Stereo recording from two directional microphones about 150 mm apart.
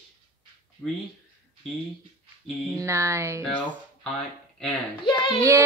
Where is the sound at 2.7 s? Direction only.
20° right (ahead or behind).